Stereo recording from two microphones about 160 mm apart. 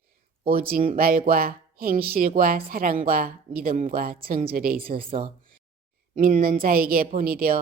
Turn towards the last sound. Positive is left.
turn(degrees=-70)  # may be behind; listen again after turning